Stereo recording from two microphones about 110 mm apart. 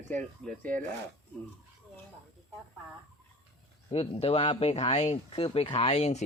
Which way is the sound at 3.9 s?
65° left (ahead or behind).